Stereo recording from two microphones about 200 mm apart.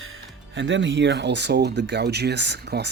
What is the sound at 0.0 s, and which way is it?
Speech, 80° right.